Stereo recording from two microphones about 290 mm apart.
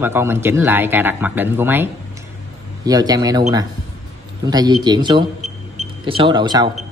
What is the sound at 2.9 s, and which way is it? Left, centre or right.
Speech, centre.